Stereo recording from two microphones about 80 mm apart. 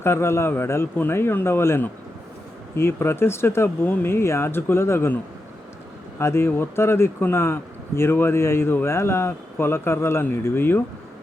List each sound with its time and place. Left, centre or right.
0.0 s speech: left
6.1 s speech: left